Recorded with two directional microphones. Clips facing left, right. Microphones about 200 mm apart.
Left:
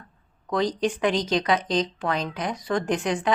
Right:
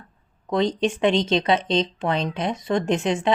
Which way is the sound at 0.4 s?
25° right (ahead or behind).